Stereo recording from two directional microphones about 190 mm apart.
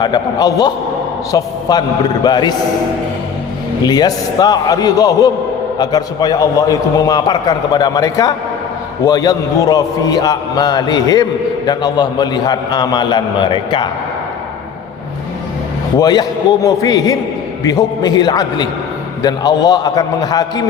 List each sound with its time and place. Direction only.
0.0 s a man's voice: 20° left (ahead or behind)
3.8 s a man's voice: 20° left (ahead or behind)
16.0 s a man's voice: 20° left (ahead or behind)